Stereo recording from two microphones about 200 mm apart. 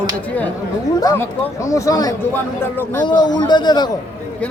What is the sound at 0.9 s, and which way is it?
Speech, 15° left (ahead or behind).